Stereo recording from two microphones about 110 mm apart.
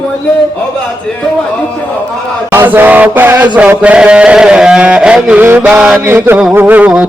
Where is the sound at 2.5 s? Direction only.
20° right (ahead or behind).